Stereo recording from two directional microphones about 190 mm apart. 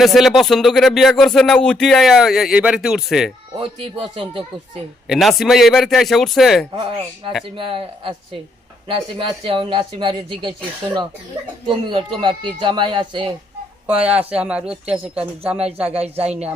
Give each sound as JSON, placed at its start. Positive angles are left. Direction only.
{"t": 0.0, "sound": "speech", "side_deg": 0}
{"t": 3.6, "sound": "speech", "side_deg": -30}
{"t": 5.0, "sound": "speech", "side_deg": 0}
{"t": 7.5, "sound": "speech", "side_deg": -25}
{"t": 11.6, "sound": "speech", "side_deg": -25}
{"t": 13.8, "sound": "speech", "side_deg": -5}
{"t": 15.9, "sound": "speech", "side_deg": -35}